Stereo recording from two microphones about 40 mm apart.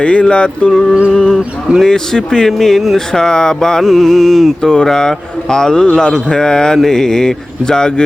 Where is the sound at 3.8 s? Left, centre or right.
Centre.